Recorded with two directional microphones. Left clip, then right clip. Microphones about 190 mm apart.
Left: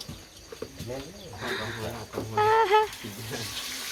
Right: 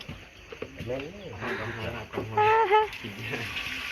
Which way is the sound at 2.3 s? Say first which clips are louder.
Even; 25° left (ahead or behind).